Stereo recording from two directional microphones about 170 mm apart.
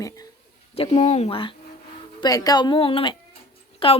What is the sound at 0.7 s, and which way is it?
Speech, 35° left (ahead or behind).